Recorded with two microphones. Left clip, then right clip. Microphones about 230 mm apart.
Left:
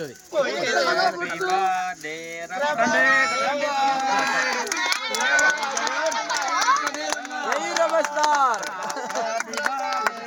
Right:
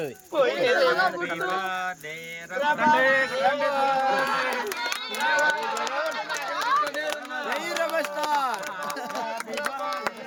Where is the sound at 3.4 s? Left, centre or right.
Centre.